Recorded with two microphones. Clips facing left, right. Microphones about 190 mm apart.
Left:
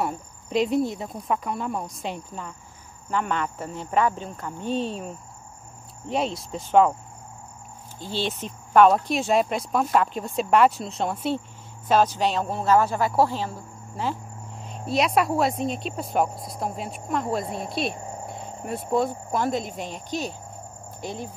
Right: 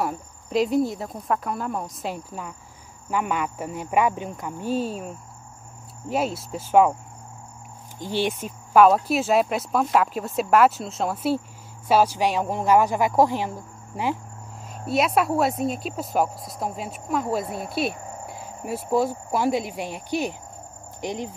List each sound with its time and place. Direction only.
0.0 s speech: centre (ahead or behind)
8.0 s speech: 15° right (ahead or behind)
14.6 s speech: 5° right (ahead or behind)